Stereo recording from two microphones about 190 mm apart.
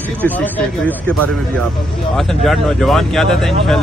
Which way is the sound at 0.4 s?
10° left (ahead or behind).